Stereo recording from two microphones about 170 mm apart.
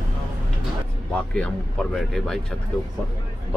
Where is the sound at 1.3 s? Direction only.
5° left (ahead or behind).